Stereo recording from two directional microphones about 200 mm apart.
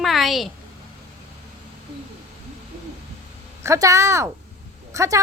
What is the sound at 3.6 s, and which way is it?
A woman's voice, 15° right (ahead or behind).